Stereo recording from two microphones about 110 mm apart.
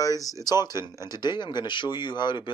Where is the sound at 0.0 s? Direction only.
30° left (ahead or behind).